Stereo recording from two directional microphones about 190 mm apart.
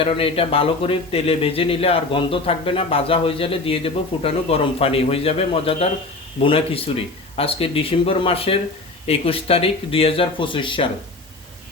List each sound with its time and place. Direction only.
0.0 s speech: 30° left (ahead or behind)